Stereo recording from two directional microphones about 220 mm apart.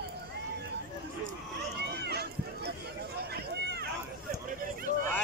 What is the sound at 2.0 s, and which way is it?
Run, 50° right (ahead or behind).